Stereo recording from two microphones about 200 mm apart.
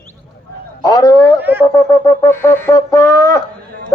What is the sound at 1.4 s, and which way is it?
Speech, 10° right (ahead or behind).